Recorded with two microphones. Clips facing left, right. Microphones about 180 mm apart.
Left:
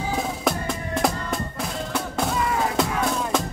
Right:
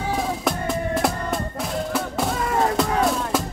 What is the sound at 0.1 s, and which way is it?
Music, centre (ahead or behind).